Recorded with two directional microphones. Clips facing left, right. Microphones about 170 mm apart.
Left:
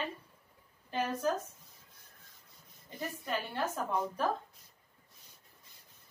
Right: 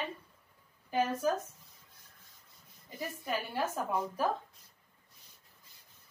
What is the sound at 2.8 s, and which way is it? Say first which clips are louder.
Speech: right 1 dB; 5° right (ahead or behind).